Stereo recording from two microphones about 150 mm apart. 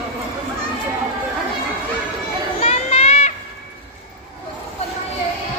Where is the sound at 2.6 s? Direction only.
45° left (ahead or behind).